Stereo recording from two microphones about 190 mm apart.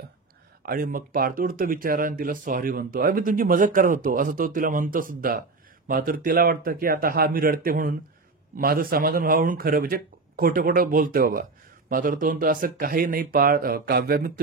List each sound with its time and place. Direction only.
0.7 s speech: 50° right (ahead or behind)